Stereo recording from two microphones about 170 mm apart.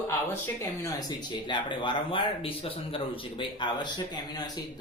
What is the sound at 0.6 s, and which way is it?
Speech, 25° left (ahead or behind).